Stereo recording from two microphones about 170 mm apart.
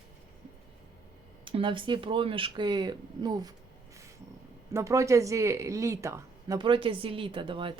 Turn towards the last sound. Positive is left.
turn(degrees=-30)  # may be behind; listen again after turning